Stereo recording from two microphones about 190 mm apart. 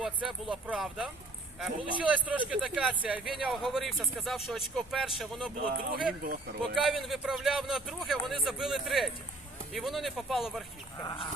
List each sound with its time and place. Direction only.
0.3 s speech: centre (ahead or behind)
5.6 s speech: 45° right (ahead or behind)
6.7 s speech: centre (ahead or behind)
11.0 s speech: 20° left (ahead or behind)